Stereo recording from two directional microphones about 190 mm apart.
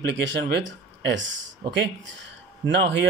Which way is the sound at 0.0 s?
70° right (ahead or behind).